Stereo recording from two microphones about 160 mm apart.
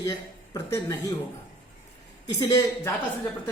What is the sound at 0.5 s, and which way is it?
Speech, 20° left (ahead or behind).